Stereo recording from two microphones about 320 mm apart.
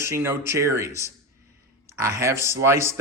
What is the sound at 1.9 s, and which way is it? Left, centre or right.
Speech, centre.